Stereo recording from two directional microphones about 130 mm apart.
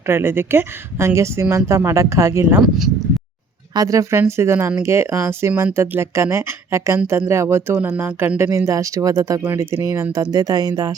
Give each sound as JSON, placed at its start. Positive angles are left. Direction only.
{"t": 0.1, "sound": "speech", "side_deg": -15}
{"t": 3.8, "sound": "speech", "side_deg": -25}